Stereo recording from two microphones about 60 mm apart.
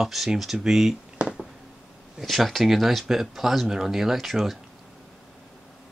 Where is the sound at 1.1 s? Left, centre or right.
Centre.